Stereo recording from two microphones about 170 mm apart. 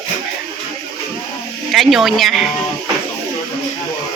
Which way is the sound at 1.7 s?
Centre (ahead or behind).